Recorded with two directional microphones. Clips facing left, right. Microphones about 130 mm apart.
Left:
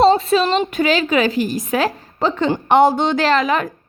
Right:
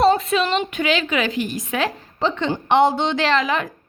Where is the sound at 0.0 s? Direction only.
30° left (ahead or behind).